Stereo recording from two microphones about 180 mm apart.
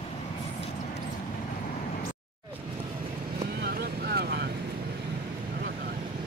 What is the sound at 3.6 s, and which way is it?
Vehicle, 65° right (ahead or behind).